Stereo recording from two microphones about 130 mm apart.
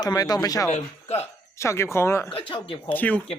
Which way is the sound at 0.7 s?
55° left (ahead or behind).